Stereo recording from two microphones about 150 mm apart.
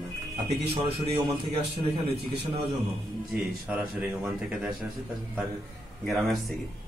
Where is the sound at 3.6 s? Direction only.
10° right (ahead or behind).